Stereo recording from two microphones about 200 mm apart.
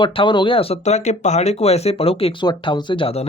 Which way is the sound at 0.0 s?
25° left (ahead or behind).